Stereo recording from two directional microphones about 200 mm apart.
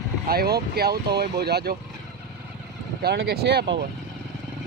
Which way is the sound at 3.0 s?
55° right (ahead or behind).